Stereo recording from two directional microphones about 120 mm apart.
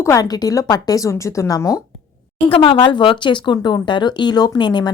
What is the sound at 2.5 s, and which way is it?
Speech, 45° left (ahead or behind).